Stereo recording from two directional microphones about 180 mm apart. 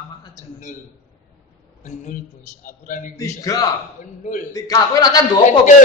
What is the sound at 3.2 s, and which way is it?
Speech, 20° left (ahead or behind).